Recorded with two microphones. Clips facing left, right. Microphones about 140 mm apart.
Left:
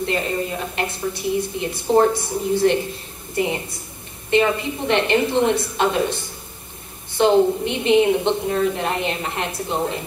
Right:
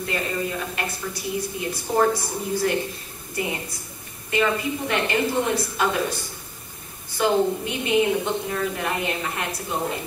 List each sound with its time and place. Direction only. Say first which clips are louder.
0.0 s a woman's voice: left 4 dB; 25° left (ahead or behind)